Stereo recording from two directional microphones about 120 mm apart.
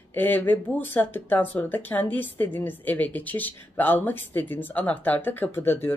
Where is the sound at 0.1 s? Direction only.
15° left (ahead or behind).